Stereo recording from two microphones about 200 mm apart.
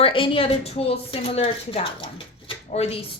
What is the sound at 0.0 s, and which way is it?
Speech, 25° left (ahead or behind).